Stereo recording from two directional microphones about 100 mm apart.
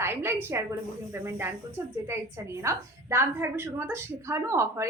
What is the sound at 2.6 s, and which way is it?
A woman's voice, 25° right (ahead or behind).